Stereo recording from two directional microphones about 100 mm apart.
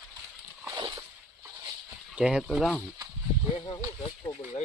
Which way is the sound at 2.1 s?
5° right (ahead or behind).